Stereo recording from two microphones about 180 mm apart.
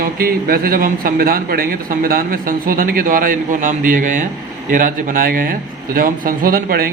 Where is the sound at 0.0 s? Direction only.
55° right (ahead or behind).